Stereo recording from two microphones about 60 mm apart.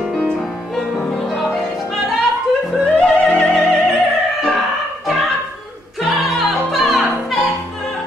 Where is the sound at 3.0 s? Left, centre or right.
Centre.